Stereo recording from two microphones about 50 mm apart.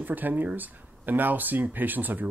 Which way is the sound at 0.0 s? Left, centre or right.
Right.